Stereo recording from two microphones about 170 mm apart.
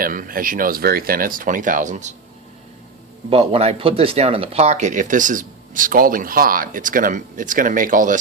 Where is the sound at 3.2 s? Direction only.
35° right (ahead or behind).